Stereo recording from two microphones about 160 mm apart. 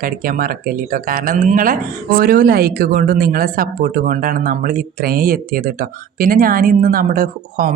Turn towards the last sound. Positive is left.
turn(degrees=-60)  # may be behind; listen again after turning